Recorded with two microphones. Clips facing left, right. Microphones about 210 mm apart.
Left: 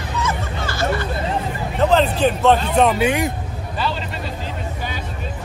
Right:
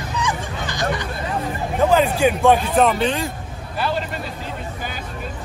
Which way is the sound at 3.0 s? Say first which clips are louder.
Left 3 dB; 15° left (ahead or behind).